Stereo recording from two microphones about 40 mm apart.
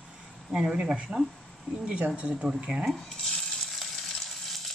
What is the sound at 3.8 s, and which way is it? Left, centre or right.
Frying, centre.